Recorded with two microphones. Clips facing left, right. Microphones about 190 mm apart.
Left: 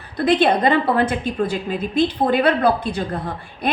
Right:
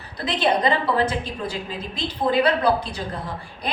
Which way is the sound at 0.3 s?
55° left (ahead or behind).